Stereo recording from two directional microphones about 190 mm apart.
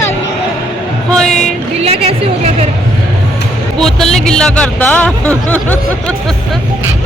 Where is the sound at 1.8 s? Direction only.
30° right (ahead or behind).